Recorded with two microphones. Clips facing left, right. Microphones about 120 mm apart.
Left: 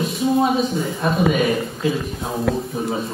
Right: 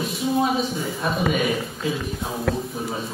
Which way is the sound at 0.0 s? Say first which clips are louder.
Left 4 dB; centre (ahead or behind).